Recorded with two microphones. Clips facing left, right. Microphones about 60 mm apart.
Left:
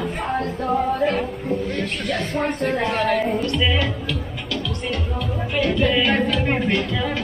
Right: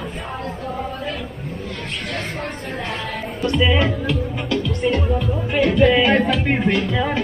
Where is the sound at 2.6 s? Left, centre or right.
Left.